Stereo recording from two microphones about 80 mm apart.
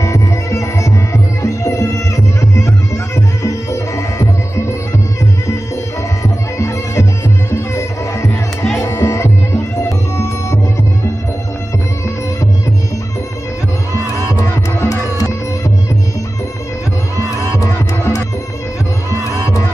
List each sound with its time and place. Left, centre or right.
0.0 s music: left
7.5 s music: left
14.4 s music: left
17.6 s music: left